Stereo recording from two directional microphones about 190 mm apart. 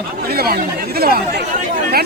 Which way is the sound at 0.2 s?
55° right (ahead or behind).